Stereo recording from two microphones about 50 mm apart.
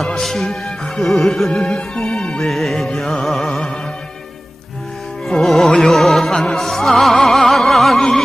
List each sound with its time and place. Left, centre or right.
0.2 s music: centre; by 2.5 s left
2.5 s music: centre
5.3 s music: centre